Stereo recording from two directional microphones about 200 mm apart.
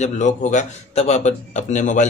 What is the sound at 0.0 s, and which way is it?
A man's voice, 35° left (ahead or behind).